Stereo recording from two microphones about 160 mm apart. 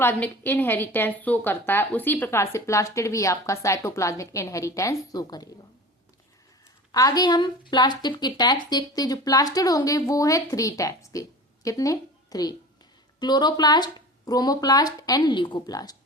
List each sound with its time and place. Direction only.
0.0 s a woman's voice: 10° left (ahead or behind)
6.9 s a woman's voice: 25° left (ahead or behind)